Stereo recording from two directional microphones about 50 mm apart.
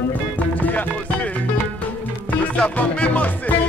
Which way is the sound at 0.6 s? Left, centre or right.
Left.